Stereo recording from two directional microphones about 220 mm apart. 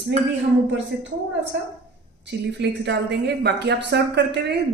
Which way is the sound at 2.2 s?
50° right (ahead or behind).